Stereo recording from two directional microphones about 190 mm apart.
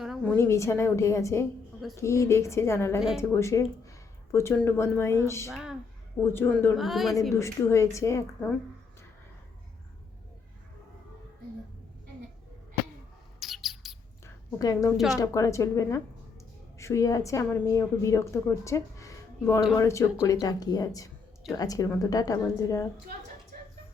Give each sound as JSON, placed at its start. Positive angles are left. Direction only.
{"t": 0.0, "sound": "a sound", "side_deg": 0}
{"t": 0.3, "sound": "a woman's voice", "side_deg": 15}
{"t": 6.7, "sound": "a woman's voice", "side_deg": 0}
{"t": 7.3, "sound": "a woman's voice", "side_deg": 15}
{"t": 13.4, "sound": "bird", "side_deg": 0}
{"t": 14.6, "sound": "a woman's voice", "side_deg": 20}